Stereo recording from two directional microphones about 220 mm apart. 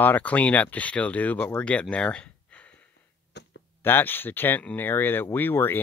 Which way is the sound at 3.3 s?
50° left (ahead or behind).